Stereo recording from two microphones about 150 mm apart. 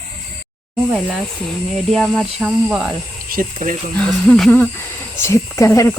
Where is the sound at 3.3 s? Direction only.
65° right (ahead or behind).